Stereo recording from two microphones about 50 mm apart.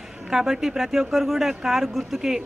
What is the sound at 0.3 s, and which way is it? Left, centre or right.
Speech, centre.